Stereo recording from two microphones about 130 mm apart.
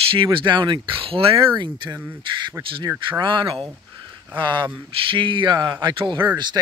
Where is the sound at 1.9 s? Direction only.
15° right (ahead or behind).